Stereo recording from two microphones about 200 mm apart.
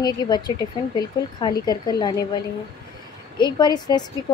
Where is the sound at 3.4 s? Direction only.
20° left (ahead or behind).